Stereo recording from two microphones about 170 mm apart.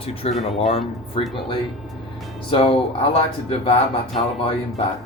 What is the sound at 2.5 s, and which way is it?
Speech, 35° left (ahead or behind).